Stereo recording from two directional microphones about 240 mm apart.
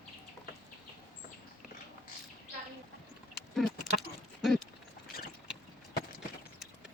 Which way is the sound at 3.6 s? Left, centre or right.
Centre.